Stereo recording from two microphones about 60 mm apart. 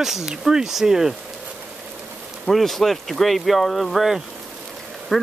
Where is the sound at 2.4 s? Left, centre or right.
Centre.